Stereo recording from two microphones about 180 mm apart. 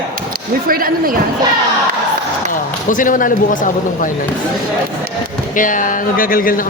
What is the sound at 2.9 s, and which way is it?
Speech, 45° left (ahead or behind).